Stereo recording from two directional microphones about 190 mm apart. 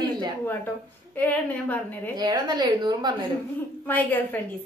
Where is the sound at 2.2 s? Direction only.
20° right (ahead or behind).